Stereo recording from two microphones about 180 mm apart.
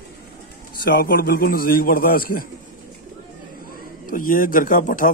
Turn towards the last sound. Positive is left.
turn(degrees=50)  # may be behind; listen again after turning